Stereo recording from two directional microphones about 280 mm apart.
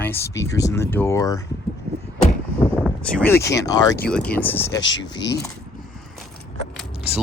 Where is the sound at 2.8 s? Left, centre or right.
Centre.